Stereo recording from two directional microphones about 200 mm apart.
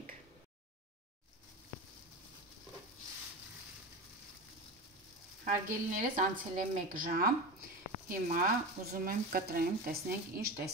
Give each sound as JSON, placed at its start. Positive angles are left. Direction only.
{"t": 5.4, "sound": "a woman's voice", "side_deg": -40}